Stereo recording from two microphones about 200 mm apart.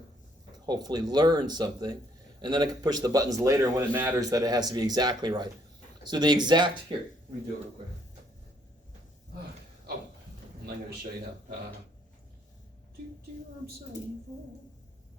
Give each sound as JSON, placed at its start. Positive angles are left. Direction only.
{"t": 0.6, "sound": "a man's voice", "side_deg": -20}